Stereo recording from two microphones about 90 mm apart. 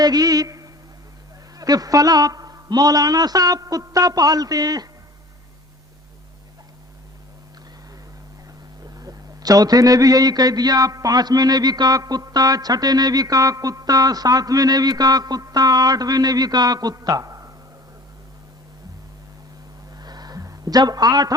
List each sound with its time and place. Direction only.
0.0 s a man's voice: 45° right (ahead or behind)
8.8 s a man's voice: 45° right (ahead or behind)
20.0 s a sound: 50° right (ahead or behind)